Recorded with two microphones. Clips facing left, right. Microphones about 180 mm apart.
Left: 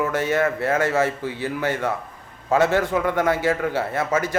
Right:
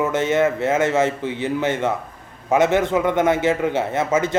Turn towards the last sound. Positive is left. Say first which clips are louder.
# right 3 dB
turn(degrees=-25)  # may be behind; listen again after turning